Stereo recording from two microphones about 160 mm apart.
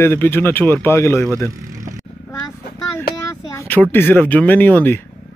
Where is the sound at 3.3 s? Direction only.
15° left (ahead or behind).